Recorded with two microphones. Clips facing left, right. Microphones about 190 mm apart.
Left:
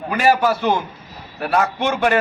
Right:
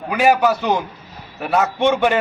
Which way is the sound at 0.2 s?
15° right (ahead or behind).